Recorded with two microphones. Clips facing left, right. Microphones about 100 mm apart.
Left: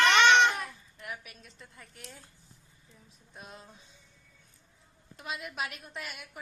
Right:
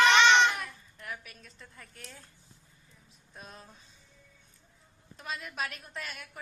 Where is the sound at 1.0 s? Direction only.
15° left (ahead or behind).